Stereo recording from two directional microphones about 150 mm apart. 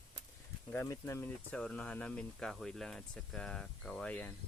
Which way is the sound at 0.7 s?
15° left (ahead or behind).